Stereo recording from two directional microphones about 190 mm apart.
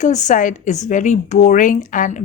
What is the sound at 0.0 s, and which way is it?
A woman's voice, 40° left (ahead or behind).